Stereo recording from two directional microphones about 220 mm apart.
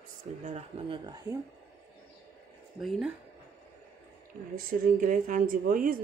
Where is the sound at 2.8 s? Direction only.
Centre (ahead or behind).